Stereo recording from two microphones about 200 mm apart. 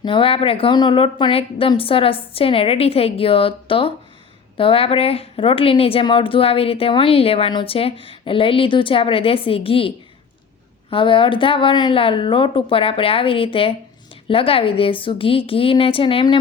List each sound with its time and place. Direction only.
0.0 s a woman's voice: 25° left (ahead or behind)